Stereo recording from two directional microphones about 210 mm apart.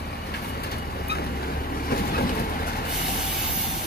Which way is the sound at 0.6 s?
50° left (ahead or behind).